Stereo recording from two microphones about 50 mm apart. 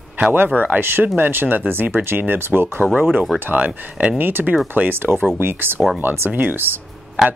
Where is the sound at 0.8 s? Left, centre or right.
Right.